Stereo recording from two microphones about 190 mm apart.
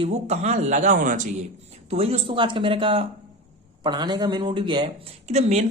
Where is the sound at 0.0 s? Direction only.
35° right (ahead or behind).